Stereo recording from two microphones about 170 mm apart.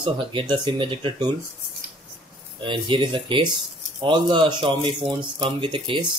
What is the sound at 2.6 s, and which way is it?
Speech, 30° right (ahead or behind).